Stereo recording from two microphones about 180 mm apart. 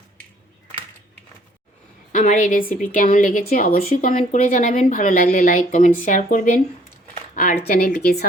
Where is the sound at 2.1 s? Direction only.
45° left (ahead or behind).